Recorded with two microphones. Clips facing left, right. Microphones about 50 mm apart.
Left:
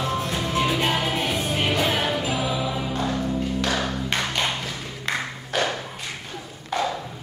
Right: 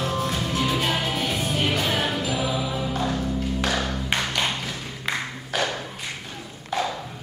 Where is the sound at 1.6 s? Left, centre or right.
Centre.